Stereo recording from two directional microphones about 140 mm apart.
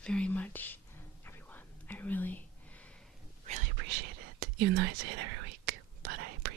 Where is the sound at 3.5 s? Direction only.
60° right (ahead or behind).